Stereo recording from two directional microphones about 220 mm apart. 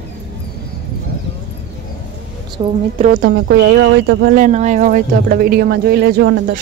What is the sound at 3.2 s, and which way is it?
Speech, 45° right (ahead or behind).